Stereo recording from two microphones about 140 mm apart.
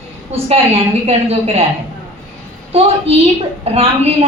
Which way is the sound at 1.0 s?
45° right (ahead or behind).